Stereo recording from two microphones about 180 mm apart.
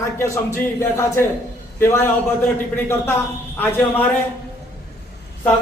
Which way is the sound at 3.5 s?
10° left (ahead or behind).